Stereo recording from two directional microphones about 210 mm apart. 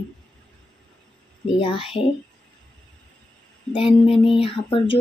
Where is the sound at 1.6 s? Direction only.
25° left (ahead or behind).